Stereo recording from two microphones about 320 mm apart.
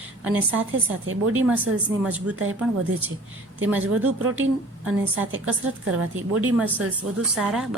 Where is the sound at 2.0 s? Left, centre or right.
Centre.